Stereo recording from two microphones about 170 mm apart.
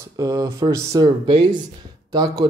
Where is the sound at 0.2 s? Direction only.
20° right (ahead or behind).